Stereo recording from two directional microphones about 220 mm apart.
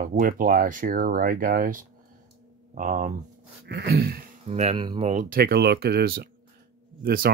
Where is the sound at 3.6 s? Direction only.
45° right (ahead or behind).